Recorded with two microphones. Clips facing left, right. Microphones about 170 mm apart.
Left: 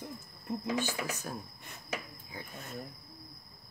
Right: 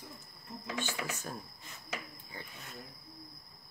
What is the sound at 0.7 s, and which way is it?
Speech, 40° left (ahead or behind).